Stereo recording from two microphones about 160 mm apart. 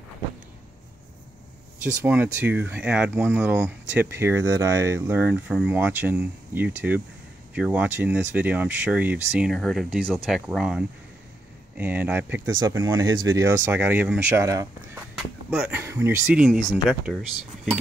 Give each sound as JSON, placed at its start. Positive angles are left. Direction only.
{"t": 2.0, "sound": "speech", "side_deg": -10}
{"t": 15.1, "sound": "speech", "side_deg": 0}
{"t": 15.7, "sound": "speech", "side_deg": -15}